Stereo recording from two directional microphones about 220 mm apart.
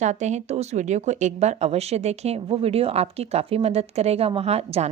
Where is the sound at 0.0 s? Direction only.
30° right (ahead or behind).